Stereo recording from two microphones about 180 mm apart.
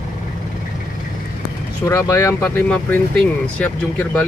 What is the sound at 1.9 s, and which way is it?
Speech, 20° left (ahead or behind).